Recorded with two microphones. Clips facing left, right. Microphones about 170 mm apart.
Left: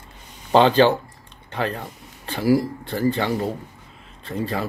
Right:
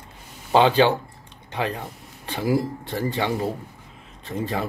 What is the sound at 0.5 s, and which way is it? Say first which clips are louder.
Speech: left 2 dB; 10° right (ahead or behind).